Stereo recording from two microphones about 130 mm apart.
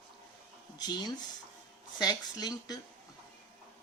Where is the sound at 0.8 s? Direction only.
30° left (ahead or behind).